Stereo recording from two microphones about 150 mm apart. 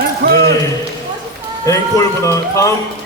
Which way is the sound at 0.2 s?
90° right.